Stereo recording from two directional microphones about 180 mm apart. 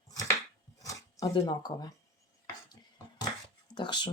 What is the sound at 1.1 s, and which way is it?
Speech, 20° left (ahead or behind).